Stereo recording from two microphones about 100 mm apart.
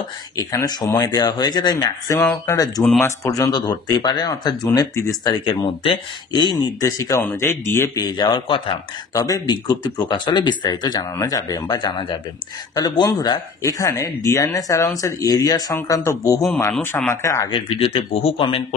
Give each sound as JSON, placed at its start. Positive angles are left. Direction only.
{"t": 0.4, "sound": "speech", "side_deg": 35}
{"t": 5.4, "sound": "speech", "side_deg": 55}
{"t": 8.0, "sound": "speech", "side_deg": 45}
{"t": 8.5, "sound": "speech", "side_deg": 60}
{"t": 9.1, "sound": "speech", "side_deg": 35}
{"t": 17.5, "sound": "speech", "side_deg": 75}